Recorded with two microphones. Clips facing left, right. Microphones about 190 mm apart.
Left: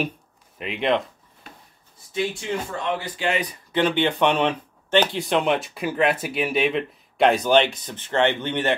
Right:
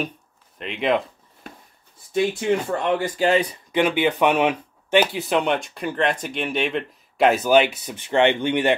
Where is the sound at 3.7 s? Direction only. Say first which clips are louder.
Right 1 dB; 10° right (ahead or behind).